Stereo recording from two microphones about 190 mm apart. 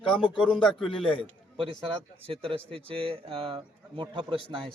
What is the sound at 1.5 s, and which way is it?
A man's voice, 25° right (ahead or behind).